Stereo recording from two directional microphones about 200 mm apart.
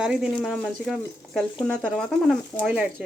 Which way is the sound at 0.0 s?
5° right (ahead or behind).